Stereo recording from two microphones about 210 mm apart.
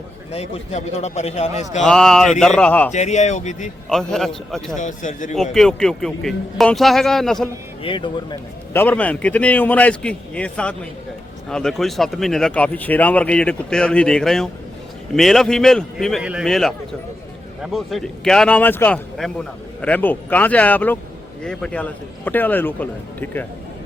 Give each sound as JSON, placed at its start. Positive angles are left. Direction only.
{"t": 0.3, "sound": "a man's voice", "side_deg": 30}
{"t": 1.8, "sound": "speech", "side_deg": 0}
{"t": 2.9, "sound": "a man's voice", "side_deg": 35}
{"t": 3.8, "sound": "speech", "side_deg": 0}
{"t": 4.8, "sound": "a man's voice", "side_deg": 35}
{"t": 5.5, "sound": "speech", "side_deg": 0}
{"t": 7.8, "sound": "speech", "side_deg": 25}
{"t": 8.7, "sound": "speech", "side_deg": 10}